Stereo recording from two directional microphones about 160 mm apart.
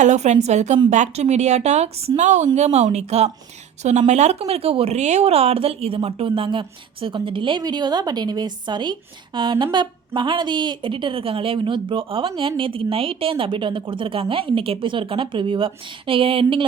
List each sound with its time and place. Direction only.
0.0 s a woman's voice: 50° right (ahead or behind)